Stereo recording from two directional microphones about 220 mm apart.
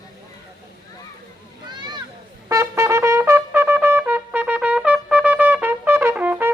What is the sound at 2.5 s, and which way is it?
Trumpet, 15° right (ahead or behind).